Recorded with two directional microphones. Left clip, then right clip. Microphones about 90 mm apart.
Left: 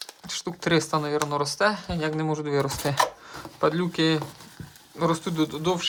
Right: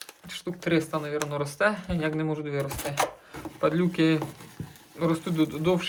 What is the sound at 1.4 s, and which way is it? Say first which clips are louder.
Speech: left 2 dB; 35° left (ahead or behind).